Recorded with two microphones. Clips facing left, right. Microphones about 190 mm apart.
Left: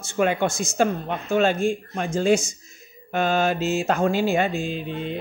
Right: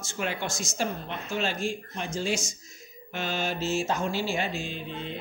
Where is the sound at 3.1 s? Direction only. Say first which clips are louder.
Left 9 dB; 50° left (ahead or behind).